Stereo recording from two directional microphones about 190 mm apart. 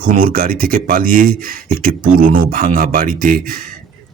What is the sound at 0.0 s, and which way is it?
A man's voice, 50° right (ahead or behind).